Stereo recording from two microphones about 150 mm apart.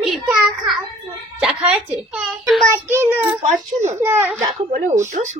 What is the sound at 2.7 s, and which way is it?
Speech, 15° right (ahead or behind).